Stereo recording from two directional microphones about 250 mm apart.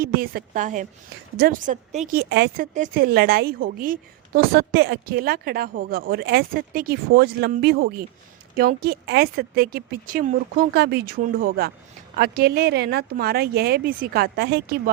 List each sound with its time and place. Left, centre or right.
0.0 s speech: right
2.3 s speech: right